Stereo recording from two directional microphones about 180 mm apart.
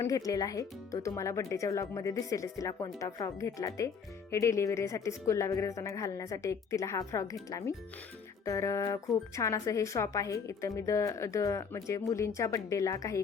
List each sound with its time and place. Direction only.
0.0 s speech: 20° left (ahead or behind)